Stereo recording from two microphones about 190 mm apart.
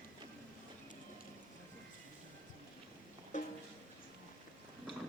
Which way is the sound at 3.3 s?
40° left (ahead or behind).